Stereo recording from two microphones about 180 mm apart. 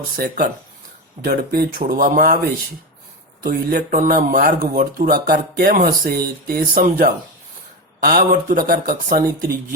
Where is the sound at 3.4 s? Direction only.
55° right (ahead or behind).